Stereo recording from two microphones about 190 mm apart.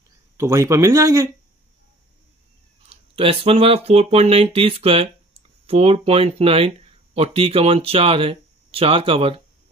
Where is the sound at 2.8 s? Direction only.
30° right (ahead or behind).